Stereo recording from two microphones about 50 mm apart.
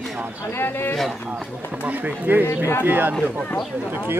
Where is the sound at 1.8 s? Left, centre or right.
Right.